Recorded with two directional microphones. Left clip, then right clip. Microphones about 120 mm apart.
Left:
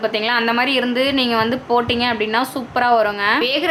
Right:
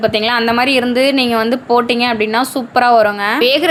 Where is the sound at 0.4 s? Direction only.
40° right (ahead or behind).